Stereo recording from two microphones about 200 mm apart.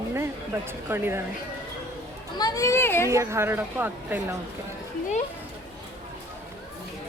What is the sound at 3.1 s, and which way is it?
Speech, 15° right (ahead or behind).